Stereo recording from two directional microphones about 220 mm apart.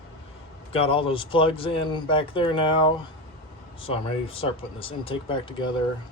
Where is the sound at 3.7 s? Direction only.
25° left (ahead or behind).